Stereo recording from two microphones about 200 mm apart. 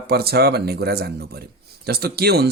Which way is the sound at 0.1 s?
50° right (ahead or behind).